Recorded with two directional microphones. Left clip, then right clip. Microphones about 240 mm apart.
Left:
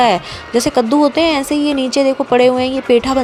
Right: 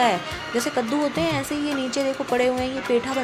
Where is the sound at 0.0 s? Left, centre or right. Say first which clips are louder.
Left 8 dB; left.